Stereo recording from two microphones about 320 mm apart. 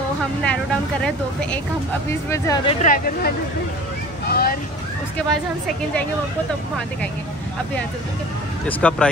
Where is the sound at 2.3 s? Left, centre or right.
Centre.